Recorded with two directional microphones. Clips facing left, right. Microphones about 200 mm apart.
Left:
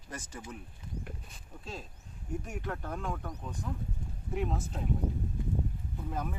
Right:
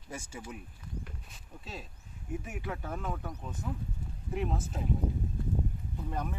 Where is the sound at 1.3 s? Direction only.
Centre (ahead or behind).